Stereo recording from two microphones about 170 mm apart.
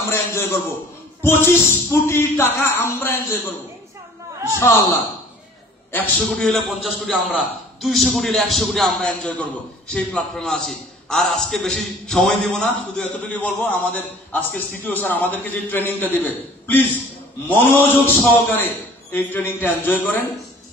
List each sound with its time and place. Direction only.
0.1 s a man's voice: 15° left (ahead or behind)
4.6 s a man's voice: 15° left (ahead or behind)